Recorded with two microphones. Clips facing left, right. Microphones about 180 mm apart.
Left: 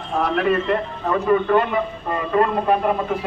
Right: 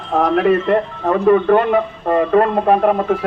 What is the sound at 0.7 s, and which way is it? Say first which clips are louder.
A man's voice: right 5 dB; 55° right (ahead or behind).